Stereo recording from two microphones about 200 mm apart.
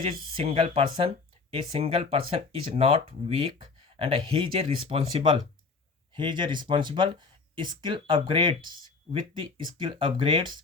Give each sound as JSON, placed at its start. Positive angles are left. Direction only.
{"t": 0.1, "sound": "speech", "side_deg": -25}